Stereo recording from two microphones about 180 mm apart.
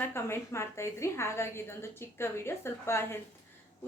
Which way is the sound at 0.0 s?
15° left (ahead or behind).